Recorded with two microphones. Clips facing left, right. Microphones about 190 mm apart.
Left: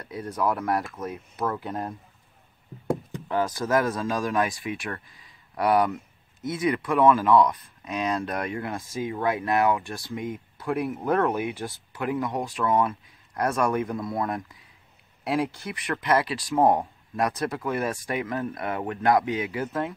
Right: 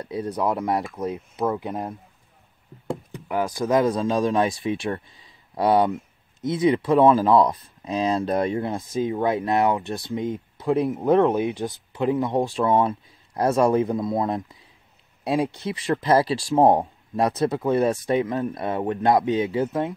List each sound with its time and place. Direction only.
0.0 s speech: 25° right (ahead or behind)
3.3 s speech: 15° right (ahead or behind)